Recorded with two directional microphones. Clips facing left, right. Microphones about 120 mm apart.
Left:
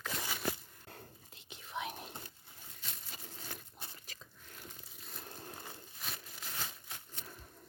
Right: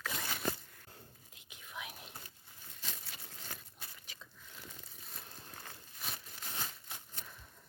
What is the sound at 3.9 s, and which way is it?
Biting, 40° left (ahead or behind).